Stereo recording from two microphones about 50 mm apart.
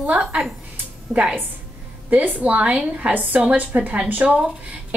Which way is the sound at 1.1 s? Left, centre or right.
Right.